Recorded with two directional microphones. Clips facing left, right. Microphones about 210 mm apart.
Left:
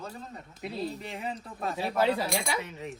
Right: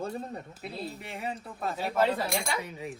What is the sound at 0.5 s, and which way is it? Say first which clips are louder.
Speech: left 4 dB; 5° right (ahead or behind).